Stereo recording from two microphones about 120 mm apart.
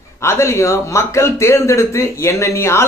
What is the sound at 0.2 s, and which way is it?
A man's voice, 20° left (ahead or behind).